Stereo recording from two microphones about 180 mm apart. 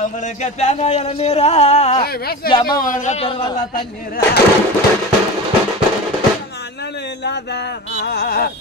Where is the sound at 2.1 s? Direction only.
60° left (ahead or behind); by 3.8 s 30° left (ahead or behind).